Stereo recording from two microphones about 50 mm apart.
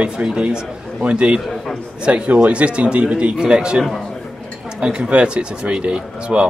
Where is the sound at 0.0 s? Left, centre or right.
Centre.